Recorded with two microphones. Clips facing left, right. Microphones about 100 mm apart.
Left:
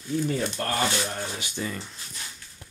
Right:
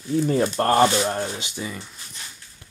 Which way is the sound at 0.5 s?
45° right (ahead or behind).